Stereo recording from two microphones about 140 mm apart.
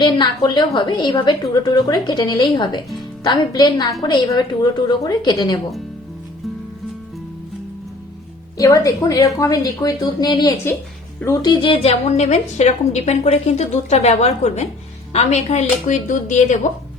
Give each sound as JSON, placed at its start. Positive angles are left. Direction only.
{"t": 0.0, "sound": "a woman's voice", "side_deg": 30}
{"t": 8.5, "sound": "a woman's voice", "side_deg": 25}